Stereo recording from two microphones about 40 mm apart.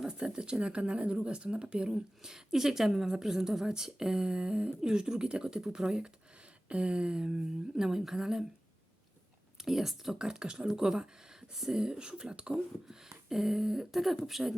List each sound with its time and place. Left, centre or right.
0.0 s speech: right
9.6 s speech: centre
13.2 s speech: centre